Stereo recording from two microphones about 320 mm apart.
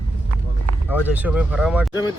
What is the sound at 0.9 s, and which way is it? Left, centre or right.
Speech, centre.